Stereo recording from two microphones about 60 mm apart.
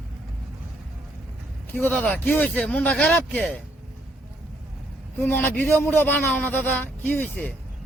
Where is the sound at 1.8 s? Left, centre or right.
Left.